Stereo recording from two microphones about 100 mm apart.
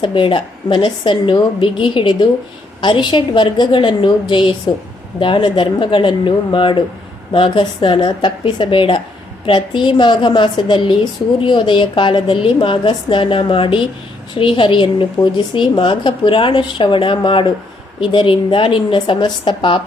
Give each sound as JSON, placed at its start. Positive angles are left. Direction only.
{"t": 0.0, "sound": "a woman's voice", "side_deg": 60}